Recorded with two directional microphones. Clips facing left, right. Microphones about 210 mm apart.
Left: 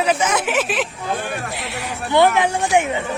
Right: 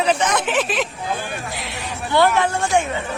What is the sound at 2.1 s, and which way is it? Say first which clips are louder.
Speech: left 2 dB; 15° left (ahead or behind).